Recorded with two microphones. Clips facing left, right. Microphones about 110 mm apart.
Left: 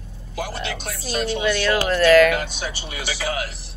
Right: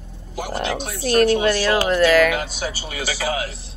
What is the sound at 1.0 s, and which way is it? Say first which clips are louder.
Speech: right 10 dB; 60° right (ahead or behind).